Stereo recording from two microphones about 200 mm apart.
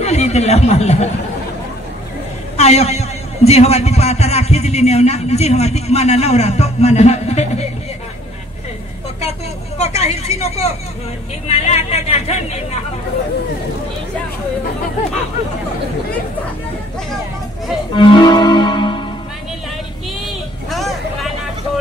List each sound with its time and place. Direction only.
0.0 s speech: 35° left (ahead or behind)
2.5 s a man's voice: 35° left (ahead or behind)
9.8 s a man's voice: 35° left (ahead or behind)
17.9 s music: 25° left (ahead or behind)
20.7 s vehicle: centre (ahead or behind)